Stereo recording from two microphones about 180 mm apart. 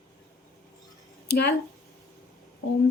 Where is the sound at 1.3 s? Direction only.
65° left (ahead or behind).